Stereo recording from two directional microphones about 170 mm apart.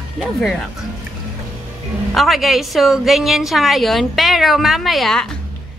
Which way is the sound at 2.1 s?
Centre (ahead or behind).